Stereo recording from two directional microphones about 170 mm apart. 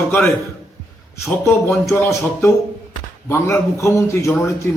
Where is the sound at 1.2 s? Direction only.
15° left (ahead or behind).